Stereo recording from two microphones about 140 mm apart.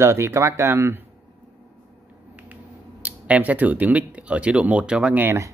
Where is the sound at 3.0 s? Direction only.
10° right (ahead or behind).